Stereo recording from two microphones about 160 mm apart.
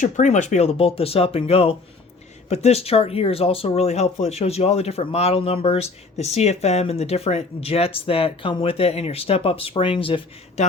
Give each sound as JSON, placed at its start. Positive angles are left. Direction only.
{"t": 0.0, "sound": "speech", "side_deg": 50}
{"t": 10.6, "sound": "speech", "side_deg": 45}